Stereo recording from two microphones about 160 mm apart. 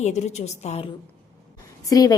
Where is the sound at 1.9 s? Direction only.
25° left (ahead or behind).